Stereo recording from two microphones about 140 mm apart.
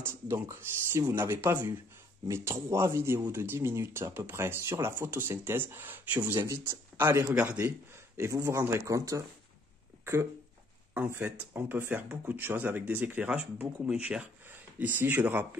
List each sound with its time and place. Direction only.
0.0 s speech: 20° right (ahead or behind)
11.0 s speech: 15° right (ahead or behind)